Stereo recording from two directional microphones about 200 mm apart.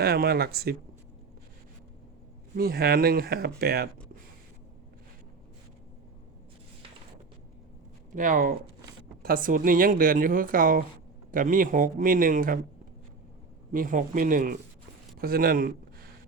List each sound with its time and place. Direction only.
0.0 s speech: 50° right (ahead or behind)
2.6 s speech: 50° right (ahead or behind)
8.1 s speech: 40° right (ahead or behind)
13.7 s speech: 40° right (ahead or behind)